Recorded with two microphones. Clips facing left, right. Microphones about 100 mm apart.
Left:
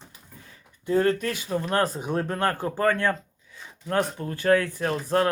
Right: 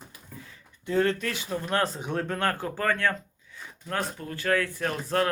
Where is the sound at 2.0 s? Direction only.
15° left (ahead or behind).